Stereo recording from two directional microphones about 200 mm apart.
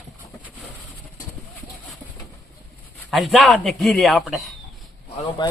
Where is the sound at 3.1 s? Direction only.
Centre (ahead or behind).